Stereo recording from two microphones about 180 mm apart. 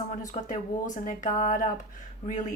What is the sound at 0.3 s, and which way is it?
A woman's voice, 45° left (ahead or behind).